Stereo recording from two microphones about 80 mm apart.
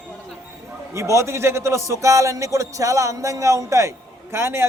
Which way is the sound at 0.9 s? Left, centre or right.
Right.